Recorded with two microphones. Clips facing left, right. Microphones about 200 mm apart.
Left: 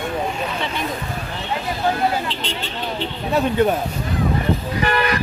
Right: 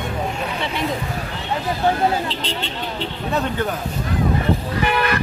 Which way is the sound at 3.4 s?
15° left (ahead or behind).